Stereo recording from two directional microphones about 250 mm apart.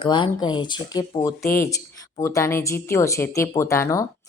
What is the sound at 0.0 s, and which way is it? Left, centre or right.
Speech, centre.